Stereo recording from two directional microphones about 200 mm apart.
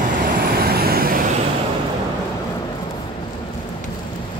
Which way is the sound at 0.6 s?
50° right (ahead or behind).